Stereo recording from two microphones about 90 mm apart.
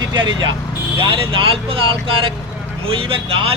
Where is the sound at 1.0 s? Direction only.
70° right (ahead or behind); by 3.5 s 90° right.